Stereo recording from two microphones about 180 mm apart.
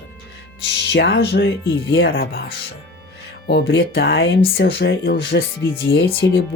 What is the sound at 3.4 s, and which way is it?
Speech, 70° left (ahead or behind).